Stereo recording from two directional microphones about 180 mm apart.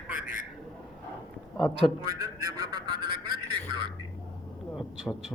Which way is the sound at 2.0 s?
20° right (ahead or behind).